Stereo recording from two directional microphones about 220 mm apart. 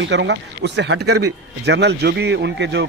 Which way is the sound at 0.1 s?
55° right (ahead or behind).